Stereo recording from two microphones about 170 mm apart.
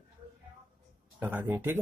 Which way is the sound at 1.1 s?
10° right (ahead or behind).